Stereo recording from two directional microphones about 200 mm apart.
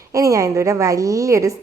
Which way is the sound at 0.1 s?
15° right (ahead or behind).